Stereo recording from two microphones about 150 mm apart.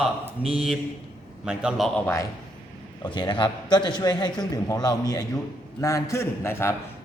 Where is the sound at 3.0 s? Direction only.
30° left (ahead or behind).